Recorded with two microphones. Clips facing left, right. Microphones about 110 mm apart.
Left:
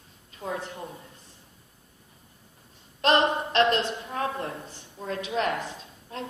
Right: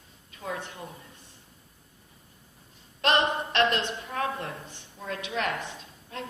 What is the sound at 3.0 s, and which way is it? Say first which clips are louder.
A woman's voice: left 3 dB; 35° left (ahead or behind).